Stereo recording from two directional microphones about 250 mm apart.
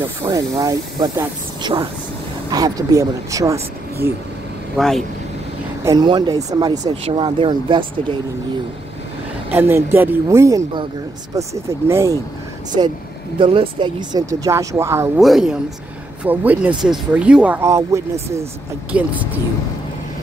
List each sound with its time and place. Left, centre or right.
0.2 s speech: centre
4.7 s speech: centre
5.9 s speech: centre
9.5 s speech: centre
13.4 s speech: right